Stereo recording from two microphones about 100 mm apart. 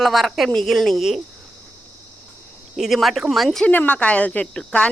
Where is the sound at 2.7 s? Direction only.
Centre (ahead or behind).